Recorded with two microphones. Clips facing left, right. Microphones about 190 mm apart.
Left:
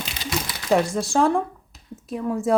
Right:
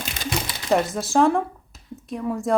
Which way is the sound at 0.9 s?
Centre (ahead or behind).